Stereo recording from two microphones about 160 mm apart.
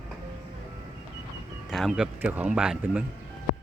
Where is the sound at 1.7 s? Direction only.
Centre (ahead or behind).